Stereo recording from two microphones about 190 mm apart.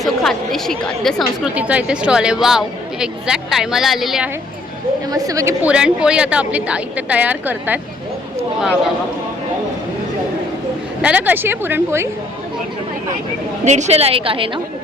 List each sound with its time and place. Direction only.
0.0 s a woman's voice: centre (ahead or behind)
5.1 s a woman's voice: 20° right (ahead or behind)
11.0 s a woman's voice: 10° right (ahead or behind)
13.7 s a woman's voice: 35° right (ahead or behind)